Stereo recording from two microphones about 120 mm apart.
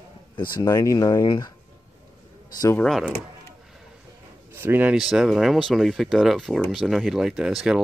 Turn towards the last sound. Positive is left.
turn(degrees=-5)  # may be behind; listen again after turning